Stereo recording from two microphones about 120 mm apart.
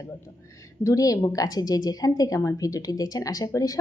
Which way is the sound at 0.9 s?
30° left (ahead or behind).